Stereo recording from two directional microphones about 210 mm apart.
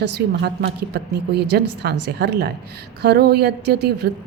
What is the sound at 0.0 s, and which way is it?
Music, 55° right (ahead or behind).